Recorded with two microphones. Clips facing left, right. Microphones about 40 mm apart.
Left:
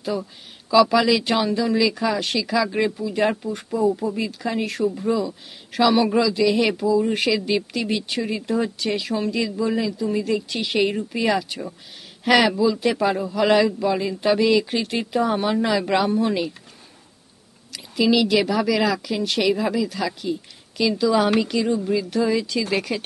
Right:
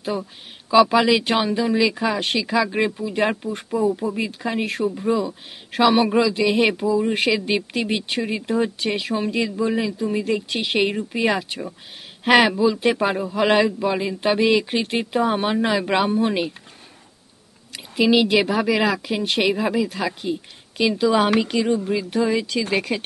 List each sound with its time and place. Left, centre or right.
0.7 s speech: right
5.2 s speech: right
17.7 s speech: right